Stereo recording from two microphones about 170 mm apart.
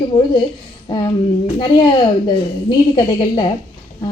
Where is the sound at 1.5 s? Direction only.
25° left (ahead or behind).